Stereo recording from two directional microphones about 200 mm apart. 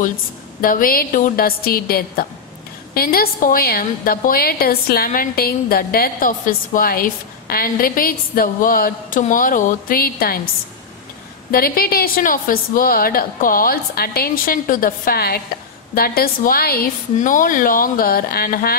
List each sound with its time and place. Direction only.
0.6 s a woman's voice: 45° left (ahead or behind)
11.5 s a woman's voice: 50° left (ahead or behind)